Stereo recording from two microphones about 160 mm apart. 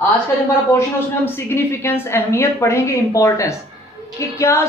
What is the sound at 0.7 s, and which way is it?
A woman's voice, 15° left (ahead or behind).